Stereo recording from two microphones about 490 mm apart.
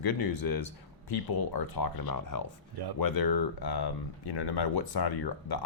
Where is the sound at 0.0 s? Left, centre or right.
Left.